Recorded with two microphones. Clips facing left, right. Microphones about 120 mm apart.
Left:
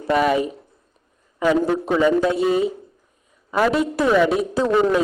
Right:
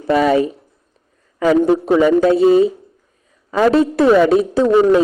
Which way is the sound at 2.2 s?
30° right (ahead or behind).